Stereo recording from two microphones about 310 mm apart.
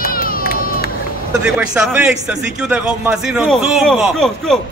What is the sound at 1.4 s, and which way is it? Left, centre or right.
A man's voice, centre.